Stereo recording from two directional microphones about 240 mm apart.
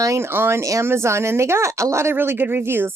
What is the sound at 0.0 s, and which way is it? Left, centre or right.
A woman's voice, centre.